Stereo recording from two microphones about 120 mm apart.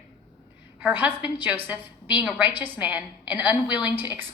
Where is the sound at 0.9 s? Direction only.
15° right (ahead or behind).